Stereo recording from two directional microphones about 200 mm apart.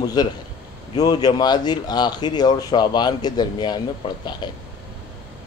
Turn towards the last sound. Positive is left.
turn(degrees=20)  # may be behind; listen again after turning